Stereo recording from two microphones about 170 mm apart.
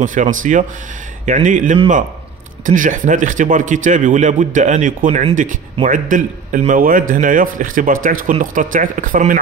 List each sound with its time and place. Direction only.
0.0 s speech: 50° right (ahead or behind)